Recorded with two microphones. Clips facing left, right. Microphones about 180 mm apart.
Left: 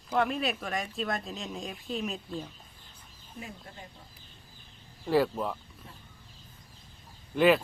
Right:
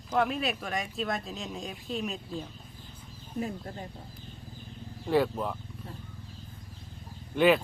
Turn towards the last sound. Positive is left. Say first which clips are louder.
# even
turn(degrees=0)  # may be behind; listen again after turning